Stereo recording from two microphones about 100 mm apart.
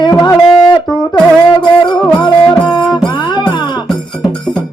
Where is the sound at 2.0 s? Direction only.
50° left (ahead or behind).